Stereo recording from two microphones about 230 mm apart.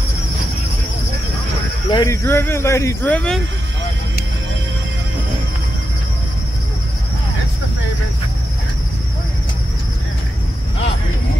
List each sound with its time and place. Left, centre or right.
1.9 s speech: centre